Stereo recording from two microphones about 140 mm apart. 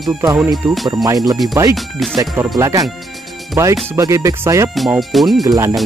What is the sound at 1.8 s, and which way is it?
Speech, centre (ahead or behind).